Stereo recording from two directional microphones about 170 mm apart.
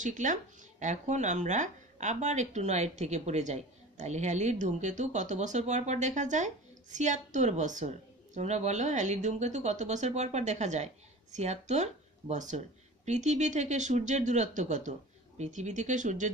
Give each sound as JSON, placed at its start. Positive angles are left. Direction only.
{"t": 0.0, "sound": "speech", "side_deg": -45}